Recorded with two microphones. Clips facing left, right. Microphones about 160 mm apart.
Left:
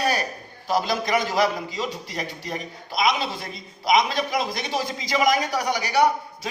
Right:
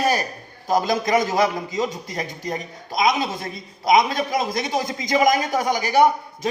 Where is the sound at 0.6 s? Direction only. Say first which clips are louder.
Right 3 dB; 45° right (ahead or behind).